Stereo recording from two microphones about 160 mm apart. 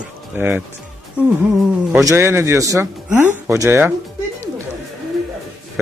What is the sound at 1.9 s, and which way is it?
Speech, 20° right (ahead or behind).